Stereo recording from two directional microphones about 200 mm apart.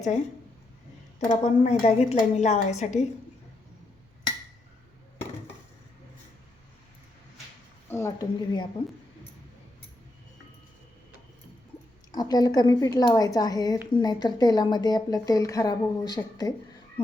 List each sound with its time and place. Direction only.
1.2 s a woman's voice: 35° left (ahead or behind)
7.9 s a woman's voice: 15° left (ahead or behind)
12.1 s a woman's voice: 20° left (ahead or behind)